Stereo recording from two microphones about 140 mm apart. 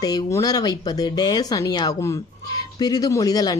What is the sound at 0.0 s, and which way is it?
Speech, 25° left (ahead or behind).